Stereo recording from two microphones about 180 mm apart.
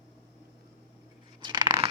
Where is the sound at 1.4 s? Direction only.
25° right (ahead or behind).